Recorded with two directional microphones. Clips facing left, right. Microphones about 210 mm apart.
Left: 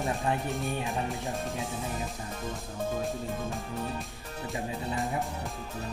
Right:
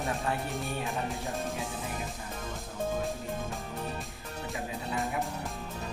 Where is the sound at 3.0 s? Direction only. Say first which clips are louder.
Left 1 dB; centre (ahead or behind).